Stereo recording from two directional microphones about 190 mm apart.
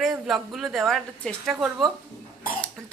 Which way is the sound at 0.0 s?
Centre (ahead or behind).